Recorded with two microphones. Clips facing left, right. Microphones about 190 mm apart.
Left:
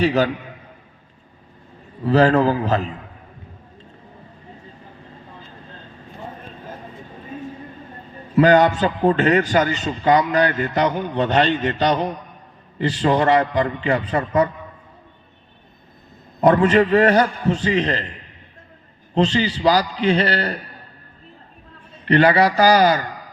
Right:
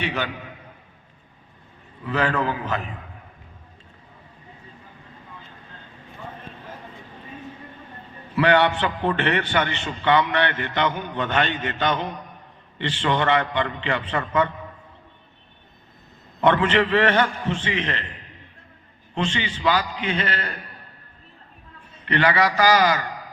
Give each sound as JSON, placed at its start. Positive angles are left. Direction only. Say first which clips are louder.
{"t": 0.0, "sound": "a man's voice", "louder": "left 10 dB", "side_deg": 35}
{"t": 2.0, "sound": "a man's voice", "louder": "left 9 dB", "side_deg": 35}
{"t": 8.4, "sound": "a man's voice", "louder": "left 5 dB", "side_deg": 40}
{"t": 16.4, "sound": "a man's voice", "louder": "left 5 dB", "side_deg": 35}
{"t": 19.1, "sound": "a man's voice", "louder": "left 8 dB", "side_deg": 35}
{"t": 22.0, "sound": "a man's voice", "louder": "left 6 dB", "side_deg": 35}